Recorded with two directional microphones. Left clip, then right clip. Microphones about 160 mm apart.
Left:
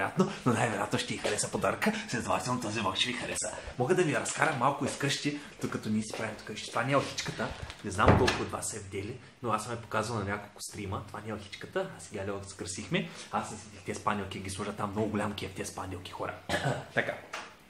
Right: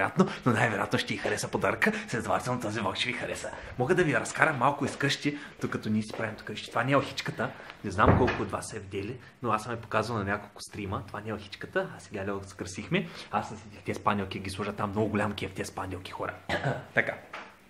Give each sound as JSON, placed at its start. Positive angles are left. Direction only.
{"t": 0.0, "sound": "speech", "side_deg": -5}
{"t": 13.8, "sound": "speech", "side_deg": -35}
{"t": 14.4, "sound": "speech", "side_deg": -15}
{"t": 16.2, "sound": "speech", "side_deg": -5}
{"t": 17.0, "sound": "speech", "side_deg": -15}